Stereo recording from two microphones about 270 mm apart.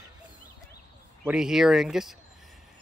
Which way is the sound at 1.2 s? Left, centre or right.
Centre.